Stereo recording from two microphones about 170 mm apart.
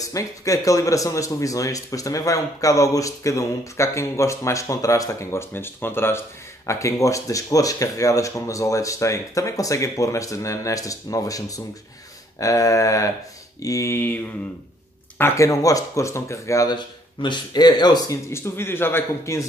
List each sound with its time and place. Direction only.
0.0 s speech: 20° left (ahead or behind)
15.1 s speech: 15° left (ahead or behind)